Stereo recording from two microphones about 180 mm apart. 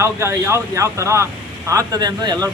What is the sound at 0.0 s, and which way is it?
Speech, 15° right (ahead or behind).